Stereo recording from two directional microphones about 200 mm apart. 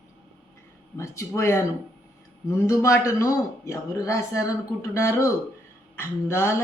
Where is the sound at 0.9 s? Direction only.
15° left (ahead or behind).